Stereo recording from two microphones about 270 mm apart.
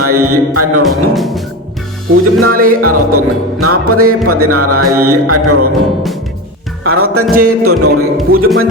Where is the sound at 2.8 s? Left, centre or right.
Right.